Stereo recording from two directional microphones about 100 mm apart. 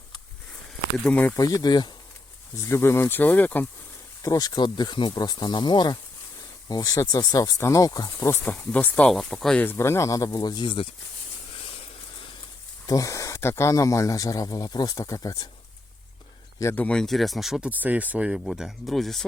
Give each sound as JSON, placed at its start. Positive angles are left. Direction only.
{"t": 1.0, "sound": "speech", "side_deg": 15}
{"t": 1.4, "sound": "speech", "side_deg": 40}
{"t": 2.6, "sound": "speech", "side_deg": 25}
{"t": 4.2, "sound": "speech", "side_deg": 35}
{"t": 8.3, "sound": "speech", "side_deg": 20}
{"t": 9.6, "sound": "speech", "side_deg": 25}
{"t": 12.9, "sound": "speech", "side_deg": 35}
{"t": 16.7, "sound": "speech", "side_deg": 10}
{"t": 17.7, "sound": "speech", "side_deg": -15}